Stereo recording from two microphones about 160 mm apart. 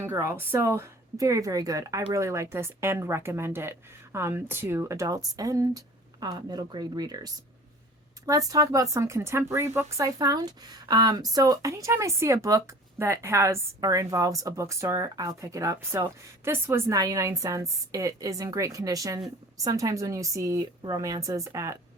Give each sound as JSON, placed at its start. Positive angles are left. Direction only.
{"t": 0.0, "sound": "speech", "side_deg": -15}
{"t": 8.3, "sound": "speech", "side_deg": -20}